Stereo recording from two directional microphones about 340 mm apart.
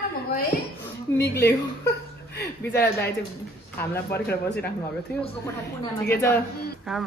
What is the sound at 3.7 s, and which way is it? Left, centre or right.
Speech, centre.